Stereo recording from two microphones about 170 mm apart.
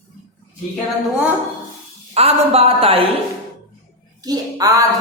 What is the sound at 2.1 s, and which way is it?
Speech, 35° right (ahead or behind).